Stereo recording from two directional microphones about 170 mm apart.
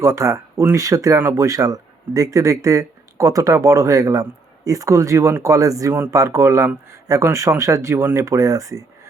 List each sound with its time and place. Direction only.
0.0 s speech: 15° right (ahead or behind)